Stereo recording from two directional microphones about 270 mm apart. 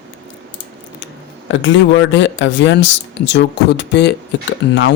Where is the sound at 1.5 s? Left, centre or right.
Left.